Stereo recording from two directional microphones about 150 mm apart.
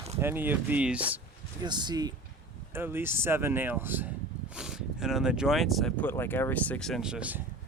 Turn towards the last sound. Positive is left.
turn(degrees=-10)  # may be behind; listen again after turning